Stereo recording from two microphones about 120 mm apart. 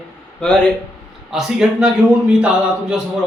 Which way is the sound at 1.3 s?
5° right (ahead or behind).